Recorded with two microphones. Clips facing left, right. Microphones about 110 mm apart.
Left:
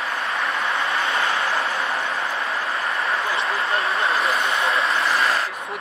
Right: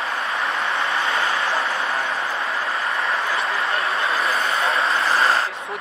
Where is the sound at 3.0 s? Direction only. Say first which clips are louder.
Even; 30° left (ahead or behind).